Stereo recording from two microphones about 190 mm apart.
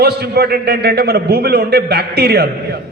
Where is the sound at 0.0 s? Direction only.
55° right (ahead or behind).